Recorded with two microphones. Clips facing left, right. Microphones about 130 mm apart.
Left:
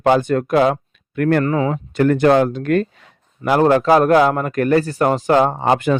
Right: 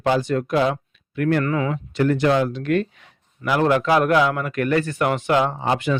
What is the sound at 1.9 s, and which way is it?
A man's voice, 50° left (ahead or behind).